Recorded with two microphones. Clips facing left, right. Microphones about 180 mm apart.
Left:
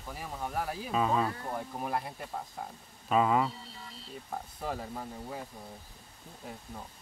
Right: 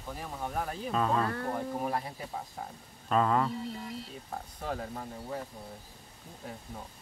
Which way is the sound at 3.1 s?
5° left (ahead or behind).